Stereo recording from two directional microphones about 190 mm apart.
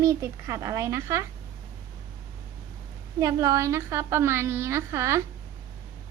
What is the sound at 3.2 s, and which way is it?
A woman's voice, 20° right (ahead or behind).